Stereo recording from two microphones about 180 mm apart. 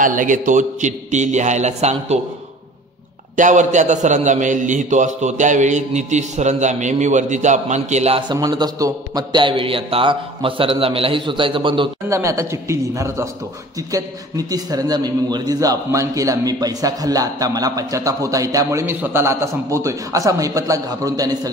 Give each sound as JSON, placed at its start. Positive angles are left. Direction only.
{"t": 0.0, "sound": "a man's voice", "side_deg": -50}
{"t": 3.3, "sound": "a man's voice", "side_deg": -45}
{"t": 8.3, "sound": "a man's voice", "side_deg": -25}
{"t": 12.1, "sound": "a man's voice", "side_deg": -15}